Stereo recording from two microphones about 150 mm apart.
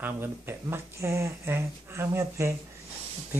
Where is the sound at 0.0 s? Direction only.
15° right (ahead or behind).